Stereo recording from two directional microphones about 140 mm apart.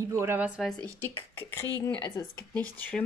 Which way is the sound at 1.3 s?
20° left (ahead or behind).